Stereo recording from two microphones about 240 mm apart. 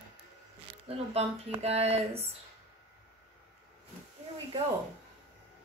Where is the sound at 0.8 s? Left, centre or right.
Right.